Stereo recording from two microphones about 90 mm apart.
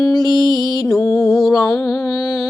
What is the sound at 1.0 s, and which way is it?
Music, 35° left (ahead or behind).